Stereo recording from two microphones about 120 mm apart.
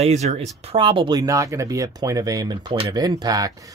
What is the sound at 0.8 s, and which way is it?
Speech, 45° right (ahead or behind).